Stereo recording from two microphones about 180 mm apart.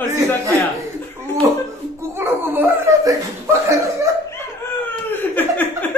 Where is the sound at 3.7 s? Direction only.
15° right (ahead or behind).